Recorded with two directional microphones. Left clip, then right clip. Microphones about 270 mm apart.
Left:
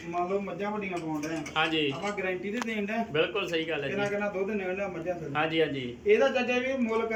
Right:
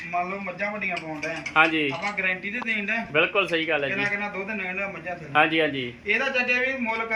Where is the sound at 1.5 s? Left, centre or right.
Right.